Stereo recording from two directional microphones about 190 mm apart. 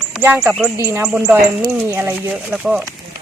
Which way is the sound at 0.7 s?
20° right (ahead or behind).